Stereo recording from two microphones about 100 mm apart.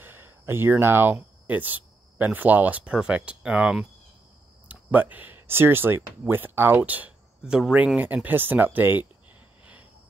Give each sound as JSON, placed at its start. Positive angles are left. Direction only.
{"t": 0.0, "sound": "speech", "side_deg": -20}